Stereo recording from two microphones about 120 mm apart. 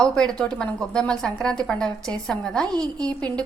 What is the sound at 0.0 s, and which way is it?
A woman's voice, 5° left (ahead or behind).